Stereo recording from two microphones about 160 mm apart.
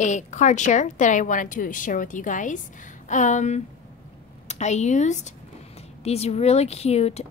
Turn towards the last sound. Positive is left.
turn(degrees=40)  # may be behind; listen again after turning